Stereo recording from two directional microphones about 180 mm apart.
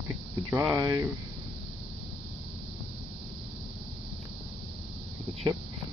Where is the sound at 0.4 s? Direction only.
15° right (ahead or behind).